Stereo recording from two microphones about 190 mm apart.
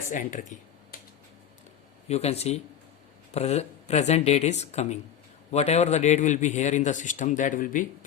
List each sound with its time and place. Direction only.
0.1 s speech: 40° left (ahead or behind)
2.0 s a man's voice: 35° left (ahead or behind)